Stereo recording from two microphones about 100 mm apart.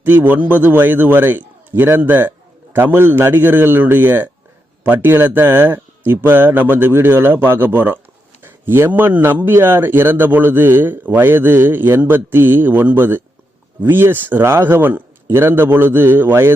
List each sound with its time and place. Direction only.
0.0 s a man's voice: 20° right (ahead or behind)